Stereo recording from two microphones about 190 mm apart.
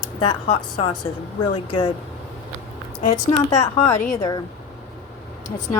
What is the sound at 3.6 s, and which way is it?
Speech, 15° left (ahead or behind).